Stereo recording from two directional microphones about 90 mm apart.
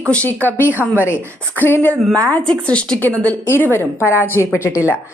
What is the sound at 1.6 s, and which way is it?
Speech, 25° left (ahead or behind).